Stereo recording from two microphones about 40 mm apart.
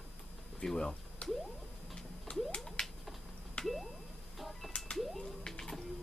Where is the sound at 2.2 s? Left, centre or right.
Left.